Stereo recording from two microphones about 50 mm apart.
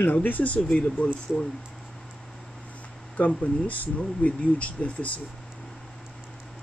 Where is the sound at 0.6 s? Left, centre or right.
Left.